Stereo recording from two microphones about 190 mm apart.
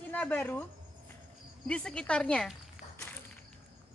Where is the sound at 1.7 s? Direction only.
5° left (ahead or behind).